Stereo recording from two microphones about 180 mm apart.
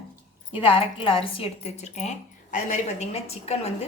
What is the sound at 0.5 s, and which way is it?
A woman's voice, 30° left (ahead or behind).